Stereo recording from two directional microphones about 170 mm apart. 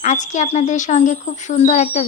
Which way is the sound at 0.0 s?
45° left (ahead or behind).